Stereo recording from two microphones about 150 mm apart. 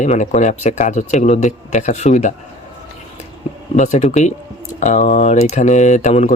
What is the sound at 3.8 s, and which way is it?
Speech, 50° left (ahead or behind).